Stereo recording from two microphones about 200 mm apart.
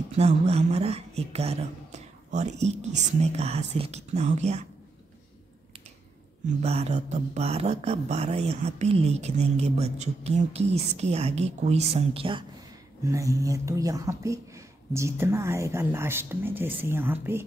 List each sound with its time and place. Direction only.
0.2 s speech: 30° right (ahead or behind)
6.6 s speech: 30° right (ahead or behind)
13.1 s speech: 15° right (ahead or behind)